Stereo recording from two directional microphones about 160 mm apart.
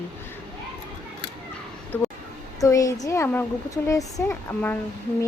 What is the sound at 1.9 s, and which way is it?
A woman's voice, 10° left (ahead or behind).